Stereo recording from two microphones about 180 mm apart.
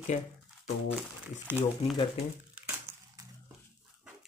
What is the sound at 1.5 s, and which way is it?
Speech, 10° right (ahead or behind).